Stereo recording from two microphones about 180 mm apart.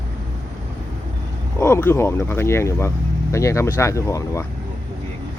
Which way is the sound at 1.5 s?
15° left (ahead or behind).